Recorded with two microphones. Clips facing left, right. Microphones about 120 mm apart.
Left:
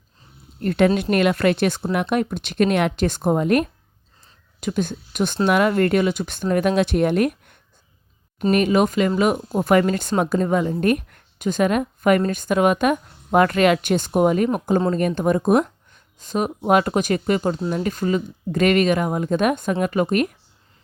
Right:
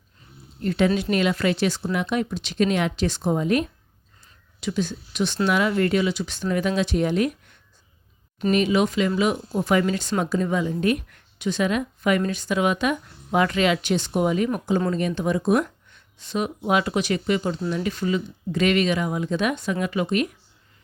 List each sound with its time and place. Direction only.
0.6 s speech: 50° left (ahead or behind)